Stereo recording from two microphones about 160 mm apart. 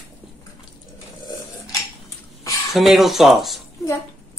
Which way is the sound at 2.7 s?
Centre (ahead or behind).